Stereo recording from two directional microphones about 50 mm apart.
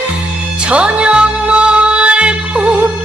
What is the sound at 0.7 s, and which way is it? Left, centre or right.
Music, right.